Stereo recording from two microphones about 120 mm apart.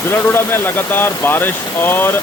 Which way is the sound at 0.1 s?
20° left (ahead or behind).